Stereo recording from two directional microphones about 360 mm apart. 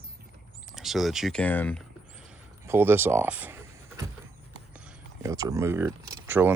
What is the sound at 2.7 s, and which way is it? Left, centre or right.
Speech, centre.